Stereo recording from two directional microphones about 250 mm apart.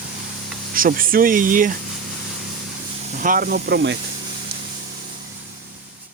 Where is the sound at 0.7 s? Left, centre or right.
Right.